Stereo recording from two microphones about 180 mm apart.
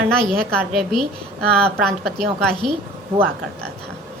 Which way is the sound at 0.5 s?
Centre (ahead or behind).